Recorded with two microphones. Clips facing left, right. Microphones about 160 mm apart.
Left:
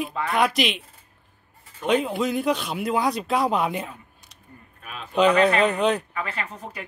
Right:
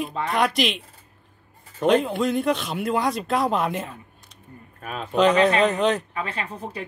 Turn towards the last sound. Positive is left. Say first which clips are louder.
# right 2 dB
turn(degrees=-30)  # may be behind; listen again after turning